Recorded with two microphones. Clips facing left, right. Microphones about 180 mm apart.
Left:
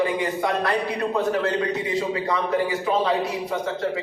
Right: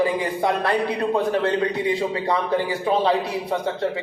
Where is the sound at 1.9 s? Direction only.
30° right (ahead or behind).